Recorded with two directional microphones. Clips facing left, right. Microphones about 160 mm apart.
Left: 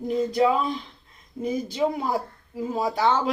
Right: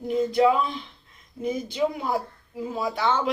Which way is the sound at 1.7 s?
35° left (ahead or behind).